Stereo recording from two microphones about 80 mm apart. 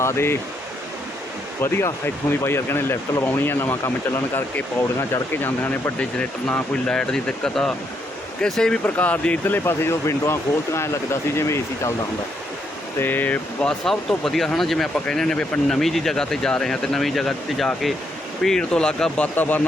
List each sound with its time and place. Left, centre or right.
0.0 s speech: left
1.6 s speech: left
6.0 s speech: centre
8.8 s speech: left
9.4 s speech: left
13.0 s speech: left